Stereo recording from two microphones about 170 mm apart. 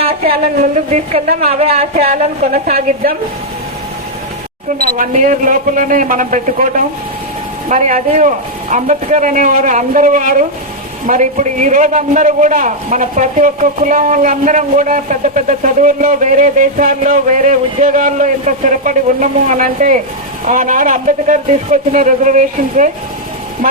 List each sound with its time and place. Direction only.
0.0 s a sound: 35° right (ahead or behind)
0.4 s speech: 45° right (ahead or behind)
2.5 s a woman's voice: 55° right (ahead or behind)
4.8 s a man's voice: 55° right (ahead or behind)